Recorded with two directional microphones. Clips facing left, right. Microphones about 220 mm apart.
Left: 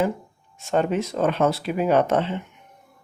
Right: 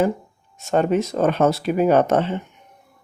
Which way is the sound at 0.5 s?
45° right (ahead or behind).